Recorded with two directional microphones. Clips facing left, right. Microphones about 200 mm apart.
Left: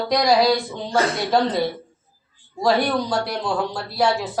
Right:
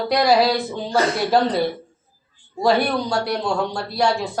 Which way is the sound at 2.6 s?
Centre (ahead or behind).